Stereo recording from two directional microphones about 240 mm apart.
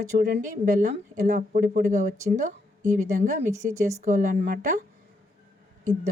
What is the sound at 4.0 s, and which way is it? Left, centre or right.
Speech, right.